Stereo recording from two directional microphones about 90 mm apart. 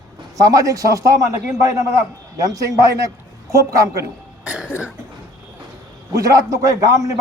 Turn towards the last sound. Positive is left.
turn(degrees=-40)  # may be behind; listen again after turning